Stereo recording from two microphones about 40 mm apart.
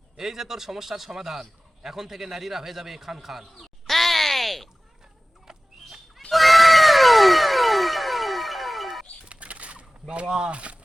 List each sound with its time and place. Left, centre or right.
0.2 s a man's voice: centre
3.6 s crow: centre
5.5 s a sound: centre
5.8 s fowl: centre
6.3 s cat: centre
9.2 s a sound: right
10.5 s speech: right